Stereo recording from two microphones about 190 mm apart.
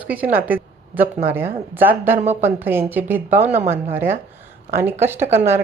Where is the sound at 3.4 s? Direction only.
35° right (ahead or behind).